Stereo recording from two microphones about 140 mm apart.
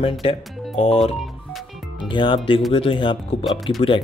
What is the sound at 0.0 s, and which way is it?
Speech, 40° left (ahead or behind).